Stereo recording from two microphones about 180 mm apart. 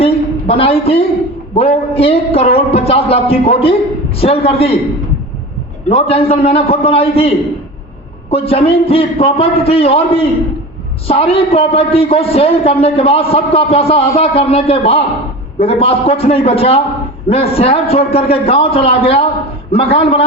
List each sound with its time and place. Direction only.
0.0 s a sound: 30° left (ahead or behind)
1.5 s a man's voice: 35° left (ahead or behind)
5.9 s a man's voice: 35° left (ahead or behind)